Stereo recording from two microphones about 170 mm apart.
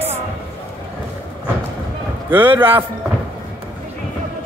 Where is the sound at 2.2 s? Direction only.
10° right (ahead or behind).